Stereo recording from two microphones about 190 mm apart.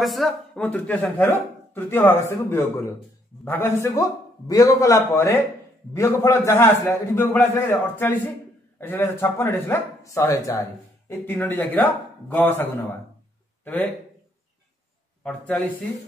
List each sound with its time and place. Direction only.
0.0 s speech: centre (ahead or behind)
15.2 s a man's voice: 5° left (ahead or behind)